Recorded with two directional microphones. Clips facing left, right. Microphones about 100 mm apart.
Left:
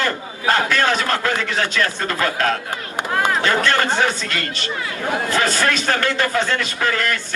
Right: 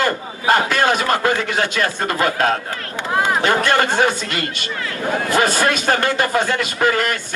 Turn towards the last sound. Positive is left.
turn(degrees=-15)  # may be behind; listen again after turning